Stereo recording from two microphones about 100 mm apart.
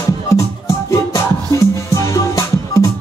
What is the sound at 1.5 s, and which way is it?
Music, 25° left (ahead or behind).